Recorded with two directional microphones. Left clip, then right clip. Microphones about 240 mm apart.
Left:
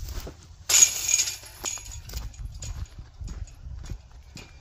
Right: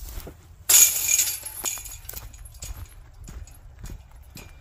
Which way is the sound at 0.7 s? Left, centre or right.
Centre.